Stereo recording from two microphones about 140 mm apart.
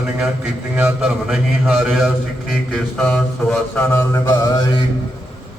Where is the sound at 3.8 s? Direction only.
20° left (ahead or behind).